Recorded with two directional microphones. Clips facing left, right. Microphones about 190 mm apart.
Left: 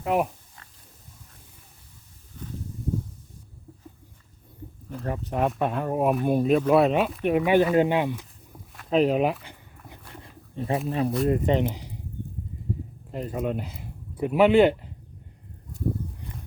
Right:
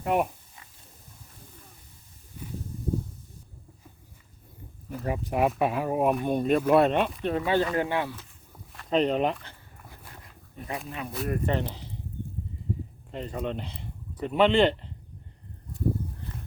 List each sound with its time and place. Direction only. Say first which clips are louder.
0.0 s speech: left 1 dB; centre (ahead or behind)
4.9 s speech: right 1 dB; 5° right (ahead or behind); by 8.3 s 15° left (ahead or behind)
8.7 s a sound: left 3 dB; 5° left (ahead or behind)
10.5 s speech: left 9 dB; 25° left (ahead or behind)
11.3 s speech: left 6 dB; 20° left (ahead or behind)
13.1 s speech: left 4 dB; 5° left (ahead or behind)